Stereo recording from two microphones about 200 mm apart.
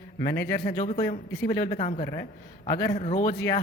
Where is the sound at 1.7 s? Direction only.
35° left (ahead or behind).